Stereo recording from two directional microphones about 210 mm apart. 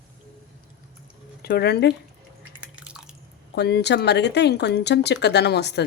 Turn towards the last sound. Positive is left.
turn(degrees=55)  # may be behind; listen again after turning